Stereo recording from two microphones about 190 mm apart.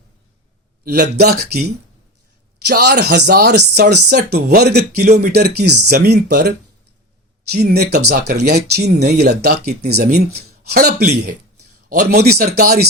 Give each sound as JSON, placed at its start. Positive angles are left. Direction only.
{"t": 0.9, "sound": "speech", "side_deg": -60}
{"t": 2.6, "sound": "speech", "side_deg": -55}
{"t": 7.6, "sound": "speech", "side_deg": -55}